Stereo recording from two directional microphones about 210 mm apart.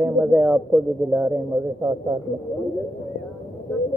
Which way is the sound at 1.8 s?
15° right (ahead or behind).